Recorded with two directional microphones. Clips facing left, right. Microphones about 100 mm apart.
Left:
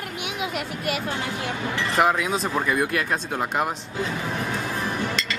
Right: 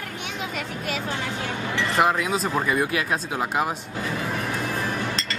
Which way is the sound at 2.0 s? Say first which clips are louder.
Left 1 dB; centre (ahead or behind).